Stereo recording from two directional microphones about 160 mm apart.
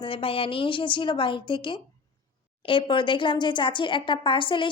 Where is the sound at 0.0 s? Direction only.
35° left (ahead or behind).